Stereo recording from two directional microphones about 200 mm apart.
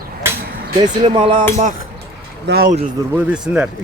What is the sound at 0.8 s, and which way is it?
Speech, 25° right (ahead or behind).